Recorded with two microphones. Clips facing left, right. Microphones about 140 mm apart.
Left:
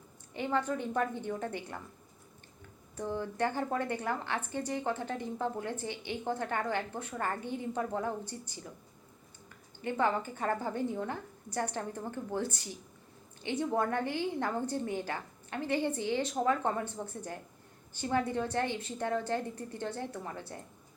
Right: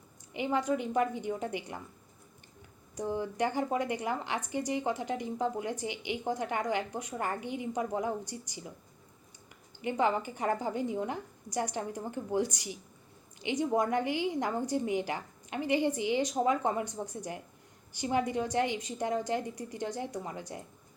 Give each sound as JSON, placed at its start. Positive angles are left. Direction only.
{"t": 0.3, "sound": "speech", "side_deg": -15}
{"t": 2.9, "sound": "speech", "side_deg": -15}
{"t": 9.8, "sound": "speech", "side_deg": -15}